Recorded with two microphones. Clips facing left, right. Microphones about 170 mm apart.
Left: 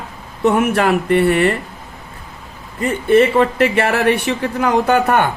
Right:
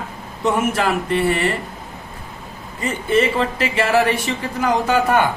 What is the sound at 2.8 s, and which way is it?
Speech, 60° left (ahead or behind).